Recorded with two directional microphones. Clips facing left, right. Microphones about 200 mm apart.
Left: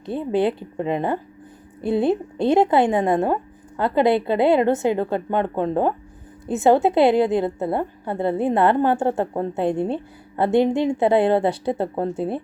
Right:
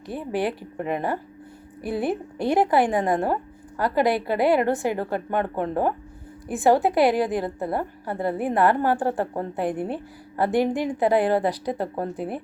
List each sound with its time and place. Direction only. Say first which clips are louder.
0.0 s a woman's voice: left 5 dB; 25° left (ahead or behind)